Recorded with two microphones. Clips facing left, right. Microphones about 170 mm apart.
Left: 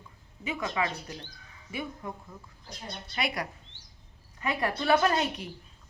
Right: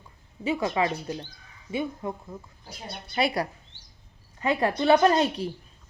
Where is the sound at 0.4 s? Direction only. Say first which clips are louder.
Right 6 dB; 30° right (ahead or behind).